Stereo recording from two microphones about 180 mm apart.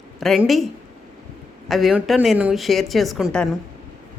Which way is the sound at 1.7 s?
Centre (ahead or behind).